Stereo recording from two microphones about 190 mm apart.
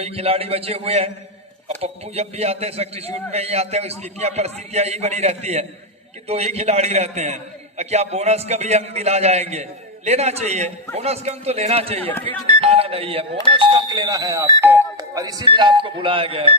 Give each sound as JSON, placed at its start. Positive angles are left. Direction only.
{"t": 0.0, "sound": "a man's voice", "side_deg": -30}
{"t": 11.9, "sound": "speech", "side_deg": 10}
{"t": 12.5, "sound": "speech", "side_deg": -30}